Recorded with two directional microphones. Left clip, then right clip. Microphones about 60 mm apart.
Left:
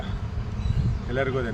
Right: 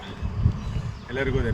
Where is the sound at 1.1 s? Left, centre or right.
Centre.